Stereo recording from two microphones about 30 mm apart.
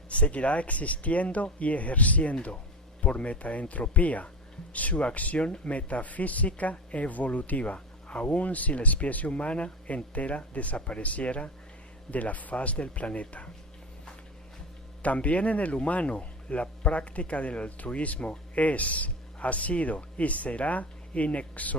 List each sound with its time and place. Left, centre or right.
0.1 s speech: left
3.0 s speech: left
5.4 s speech: left
12.1 s speech: left
15.0 s speech: left
18.6 s speech: left